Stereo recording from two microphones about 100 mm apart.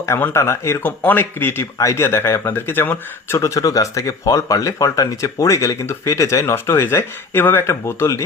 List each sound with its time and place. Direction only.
0.2 s speech: 25° left (ahead or behind)